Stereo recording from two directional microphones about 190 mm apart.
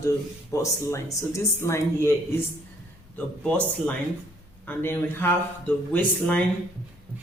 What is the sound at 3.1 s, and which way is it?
Speech, 5° left (ahead or behind).